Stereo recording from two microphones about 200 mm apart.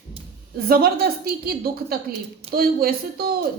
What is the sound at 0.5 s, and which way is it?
A woman's voice, 50° right (ahead or behind).